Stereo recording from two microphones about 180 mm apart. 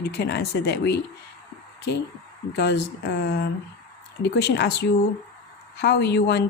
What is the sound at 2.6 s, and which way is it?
A woman's voice, 70° left (ahead or behind).